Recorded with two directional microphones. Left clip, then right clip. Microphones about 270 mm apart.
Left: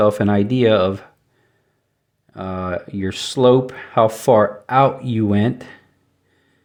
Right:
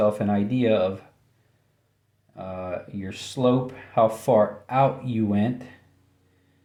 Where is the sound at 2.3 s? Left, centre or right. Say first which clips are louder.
Left 7 dB; left.